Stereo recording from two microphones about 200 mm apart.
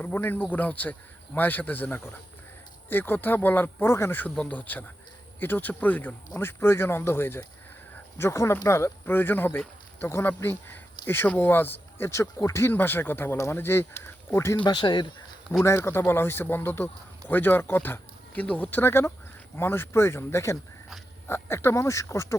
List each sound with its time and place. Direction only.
0.0 s speech: 10° left (ahead or behind)